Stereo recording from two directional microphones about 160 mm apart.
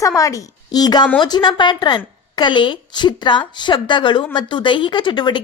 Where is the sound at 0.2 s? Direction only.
20° left (ahead or behind).